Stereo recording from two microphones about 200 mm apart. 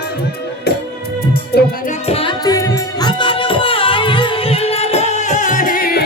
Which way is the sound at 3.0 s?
25° left (ahead or behind).